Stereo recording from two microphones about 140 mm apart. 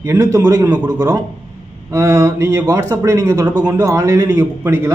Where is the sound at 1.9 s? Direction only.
20° right (ahead or behind).